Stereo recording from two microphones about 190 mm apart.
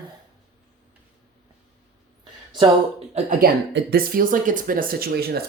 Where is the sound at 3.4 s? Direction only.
50° right (ahead or behind).